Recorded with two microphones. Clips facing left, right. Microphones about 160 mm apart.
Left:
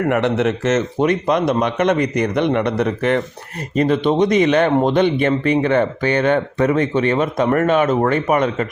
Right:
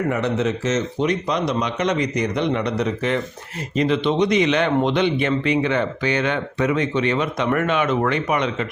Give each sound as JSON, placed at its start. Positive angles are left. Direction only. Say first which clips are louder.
{"t": 0.1, "sound": "speech", "louder": "left 4 dB", "side_deg": 75}